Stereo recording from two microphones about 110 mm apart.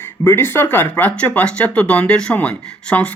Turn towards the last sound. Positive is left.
turn(degrees=10)  # may be behind; listen again after turning